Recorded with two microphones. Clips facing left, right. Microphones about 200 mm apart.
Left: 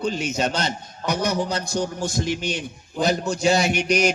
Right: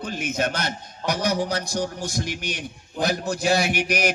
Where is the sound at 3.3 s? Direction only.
55° right (ahead or behind).